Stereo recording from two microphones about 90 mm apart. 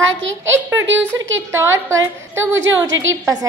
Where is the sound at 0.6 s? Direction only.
25° right (ahead or behind).